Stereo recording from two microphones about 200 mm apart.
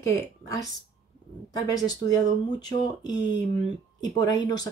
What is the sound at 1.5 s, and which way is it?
Speech, 20° left (ahead or behind).